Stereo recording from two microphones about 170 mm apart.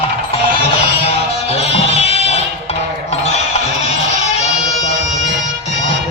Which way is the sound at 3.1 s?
40° left (ahead or behind).